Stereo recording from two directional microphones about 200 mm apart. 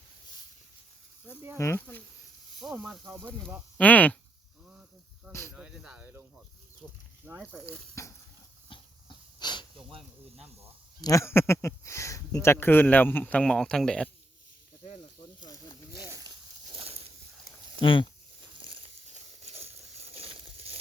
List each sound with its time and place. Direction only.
1.5 s speech: 15° left (ahead or behind)
2.6 s speech: 5° right (ahead or behind)
4.6 s snake: 5° right (ahead or behind)
5.5 s speech: 5° right (ahead or behind)
7.7 s speech: 15° left (ahead or behind)
8.7 s wheeze: 25° left (ahead or behind)
9.9 s speech: 30° right (ahead or behind)
11.0 s speech: 15° left (ahead or behind)
15.4 s snake: 20° left (ahead or behind)
16.0 s a sound: 15° right (ahead or behind)
17.7 s speech: 25° left (ahead or behind)
18.6 s a sound: 30° right (ahead or behind)